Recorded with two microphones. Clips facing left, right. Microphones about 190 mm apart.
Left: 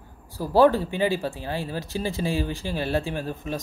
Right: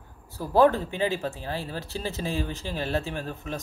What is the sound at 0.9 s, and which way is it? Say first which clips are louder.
Speech: left 3 dB; 15° left (ahead or behind).